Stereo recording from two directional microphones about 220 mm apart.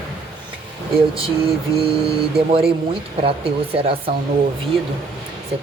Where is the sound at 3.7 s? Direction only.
25° right (ahead or behind).